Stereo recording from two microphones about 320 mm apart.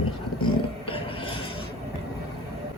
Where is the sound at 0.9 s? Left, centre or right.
Centre.